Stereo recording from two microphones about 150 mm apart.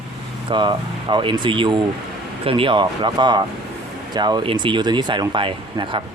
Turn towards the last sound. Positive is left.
turn(degrees=-35)  # may be behind; listen again after turning